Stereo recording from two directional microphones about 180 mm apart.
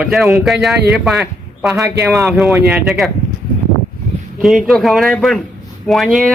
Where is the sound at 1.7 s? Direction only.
15° right (ahead or behind).